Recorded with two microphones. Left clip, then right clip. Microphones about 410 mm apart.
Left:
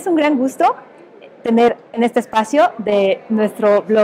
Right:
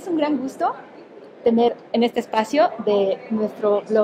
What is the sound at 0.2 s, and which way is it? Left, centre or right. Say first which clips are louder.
A woman's voice: left 7 dB; left.